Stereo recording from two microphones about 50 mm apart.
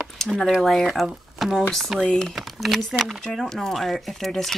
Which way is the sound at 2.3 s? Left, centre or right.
Centre.